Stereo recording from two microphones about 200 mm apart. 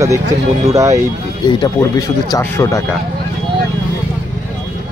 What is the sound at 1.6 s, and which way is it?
Speech, 15° left (ahead or behind).